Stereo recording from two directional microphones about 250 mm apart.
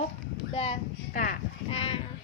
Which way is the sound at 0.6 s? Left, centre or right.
Left.